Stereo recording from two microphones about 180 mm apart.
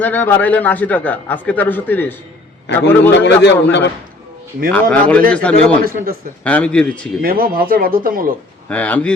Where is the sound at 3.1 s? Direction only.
85° left.